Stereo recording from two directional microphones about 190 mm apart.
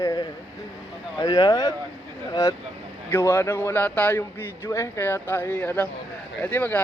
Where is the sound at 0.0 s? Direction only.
15° left (ahead or behind).